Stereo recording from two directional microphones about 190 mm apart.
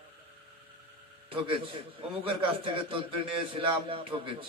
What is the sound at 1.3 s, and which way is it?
A man's voice, 30° right (ahead or behind).